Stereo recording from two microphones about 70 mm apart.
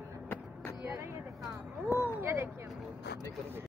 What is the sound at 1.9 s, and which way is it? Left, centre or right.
Speech, right.